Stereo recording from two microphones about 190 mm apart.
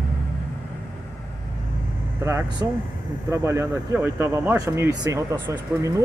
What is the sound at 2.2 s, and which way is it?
Speech, 15° right (ahead or behind).